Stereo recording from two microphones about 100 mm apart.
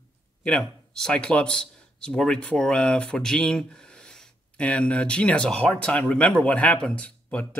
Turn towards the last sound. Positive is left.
turn(degrees=15)  # may be behind; listen again after turning